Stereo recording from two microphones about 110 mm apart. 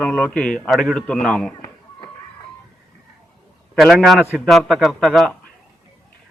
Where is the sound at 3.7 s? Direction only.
Centre (ahead or behind).